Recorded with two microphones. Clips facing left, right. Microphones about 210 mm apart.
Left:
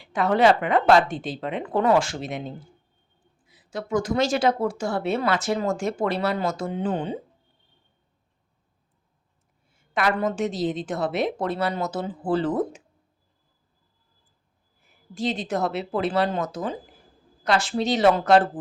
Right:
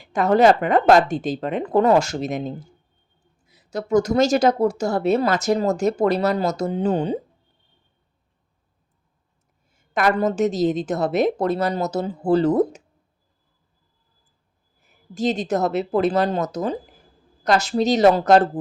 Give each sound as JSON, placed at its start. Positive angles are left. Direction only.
{"t": 0.0, "sound": "a woman's voice", "side_deg": -45}
{"t": 9.7, "sound": "speech", "side_deg": -45}
{"t": 15.1, "sound": "a woman's voice", "side_deg": -45}